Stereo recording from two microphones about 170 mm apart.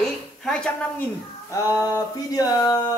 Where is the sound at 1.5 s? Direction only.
20° left (ahead or behind).